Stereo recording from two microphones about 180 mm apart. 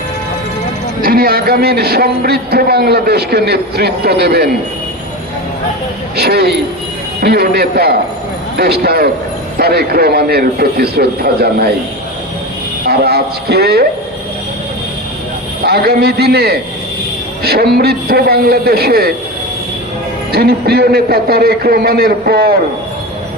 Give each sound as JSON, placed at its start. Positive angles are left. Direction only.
{"t": 1.0, "sound": "a man's voice", "side_deg": -55}
{"t": 6.1, "sound": "a man's voice", "side_deg": -65}
{"t": 12.8, "sound": "a man's voice", "side_deg": -60}
{"t": 15.6, "sound": "a man's voice", "side_deg": -60}
{"t": 20.3, "sound": "a man's voice", "side_deg": -60}